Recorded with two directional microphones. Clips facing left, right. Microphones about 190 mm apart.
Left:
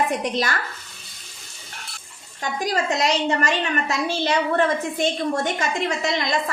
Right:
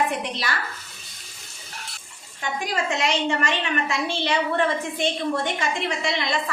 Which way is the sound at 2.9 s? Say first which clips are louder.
Left 1 dB; 40° left (ahead or behind).